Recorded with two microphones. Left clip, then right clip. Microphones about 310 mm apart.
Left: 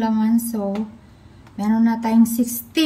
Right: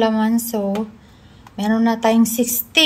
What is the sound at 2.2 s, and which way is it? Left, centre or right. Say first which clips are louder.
Speech: right 1 dB; centre.